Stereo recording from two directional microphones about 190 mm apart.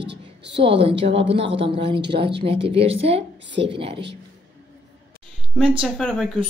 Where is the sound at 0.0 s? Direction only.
65° right (ahead or behind).